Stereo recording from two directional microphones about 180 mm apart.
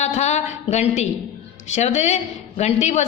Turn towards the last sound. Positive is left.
turn(degrees=40)  # may be behind; listen again after turning